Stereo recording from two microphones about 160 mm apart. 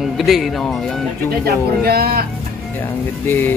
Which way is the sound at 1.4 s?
75° right (ahead or behind).